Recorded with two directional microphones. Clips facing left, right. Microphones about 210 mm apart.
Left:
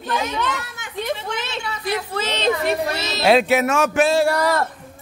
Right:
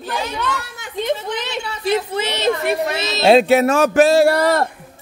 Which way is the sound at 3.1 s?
30° right (ahead or behind).